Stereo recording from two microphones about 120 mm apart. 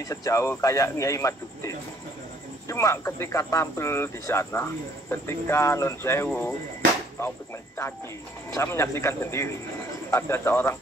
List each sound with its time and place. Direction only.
0.0 s speech: 30° left (ahead or behind)